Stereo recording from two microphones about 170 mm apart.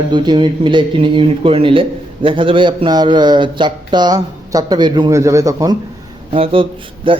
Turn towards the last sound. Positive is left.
turn(degrees=-30)  # may be behind; listen again after turning